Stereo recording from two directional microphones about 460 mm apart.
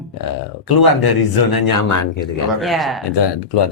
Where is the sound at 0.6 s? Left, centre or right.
Left.